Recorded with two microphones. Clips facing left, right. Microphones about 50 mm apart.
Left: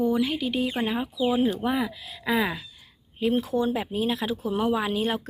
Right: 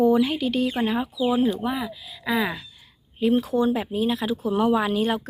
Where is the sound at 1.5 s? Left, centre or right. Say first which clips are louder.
Left 1 dB; left.